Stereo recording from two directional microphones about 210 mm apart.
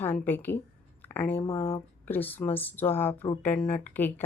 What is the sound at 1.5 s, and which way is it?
Speech, 25° left (ahead or behind).